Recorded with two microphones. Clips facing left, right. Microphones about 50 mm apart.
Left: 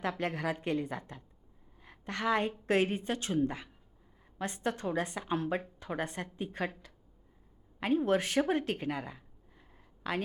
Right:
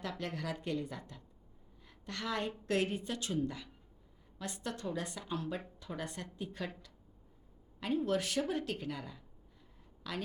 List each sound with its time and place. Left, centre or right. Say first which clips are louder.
0.0 s a woman's voice: left 6 dB; left
1.8 s a sound: left 7 dB; left
2.6 s a woman's voice: left 4 dB; left
7.8 s a woman's voice: left 5 dB; left